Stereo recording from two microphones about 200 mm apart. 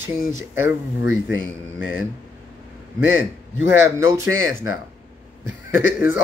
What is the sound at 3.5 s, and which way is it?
Speech, 70° left (ahead or behind).